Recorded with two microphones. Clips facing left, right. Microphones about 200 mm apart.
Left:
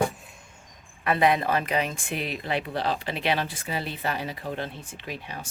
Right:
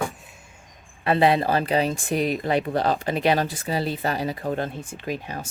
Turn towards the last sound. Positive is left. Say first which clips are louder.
# right 7 dB
turn(degrees=-45)  # may be behind; listen again after turning